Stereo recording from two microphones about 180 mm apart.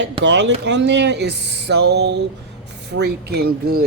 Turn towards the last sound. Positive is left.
turn(degrees=-55)  # may be behind; listen again after turning